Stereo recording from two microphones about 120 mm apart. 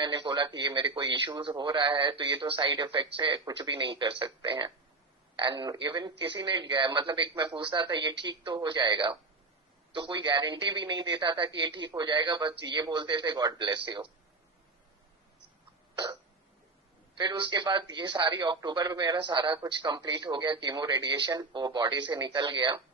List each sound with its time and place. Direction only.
0.0 s a man's voice: 40° right (ahead or behind)
17.2 s a man's voice: 35° right (ahead or behind)